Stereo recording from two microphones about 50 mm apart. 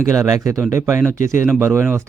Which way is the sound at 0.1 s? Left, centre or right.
Right.